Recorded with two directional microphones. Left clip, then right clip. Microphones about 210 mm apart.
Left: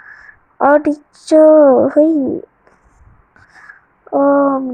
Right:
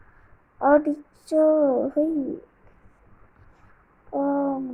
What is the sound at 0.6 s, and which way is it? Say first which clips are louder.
Speech: left 8 dB; 25° left (ahead or behind).